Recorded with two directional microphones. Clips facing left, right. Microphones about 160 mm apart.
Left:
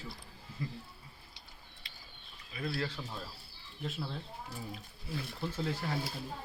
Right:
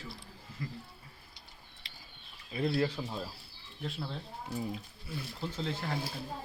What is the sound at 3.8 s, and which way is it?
Speech, centre (ahead or behind).